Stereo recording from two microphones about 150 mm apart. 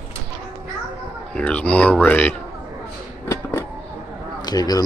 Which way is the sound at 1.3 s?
10° left (ahead or behind).